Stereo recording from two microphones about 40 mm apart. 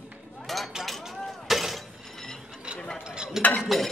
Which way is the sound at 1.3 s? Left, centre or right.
Centre.